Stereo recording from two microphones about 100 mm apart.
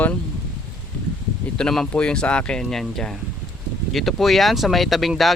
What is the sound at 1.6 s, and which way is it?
Speech, 5° left (ahead or behind).